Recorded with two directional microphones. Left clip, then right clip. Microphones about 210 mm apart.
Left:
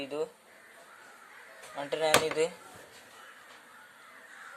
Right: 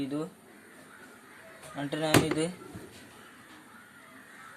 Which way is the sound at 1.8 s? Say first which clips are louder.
Even; 25° left (ahead or behind).